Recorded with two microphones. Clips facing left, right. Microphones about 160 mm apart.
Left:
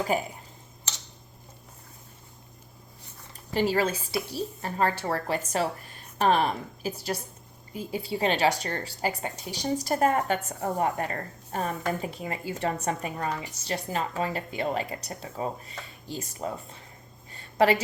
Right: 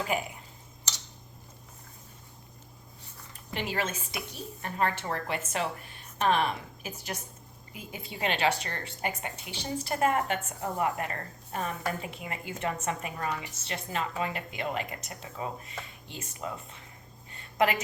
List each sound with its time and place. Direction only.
0.1 s a woman's voice: 35° left (ahead or behind)
3.5 s a woman's voice: 35° left (ahead or behind)
17.3 s a sound: 30° left (ahead or behind)